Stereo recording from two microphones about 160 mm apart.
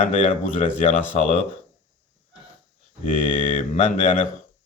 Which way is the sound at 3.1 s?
50° left (ahead or behind).